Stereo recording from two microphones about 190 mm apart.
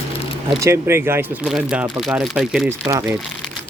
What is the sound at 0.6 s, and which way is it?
Speech, 15° right (ahead or behind).